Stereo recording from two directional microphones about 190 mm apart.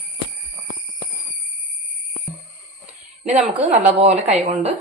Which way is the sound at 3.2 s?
35° right (ahead or behind).